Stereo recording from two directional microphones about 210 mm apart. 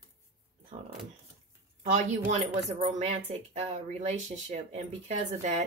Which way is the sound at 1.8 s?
35° right (ahead or behind).